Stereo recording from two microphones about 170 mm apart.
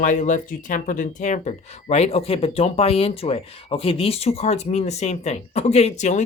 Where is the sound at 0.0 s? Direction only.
50° left (ahead or behind).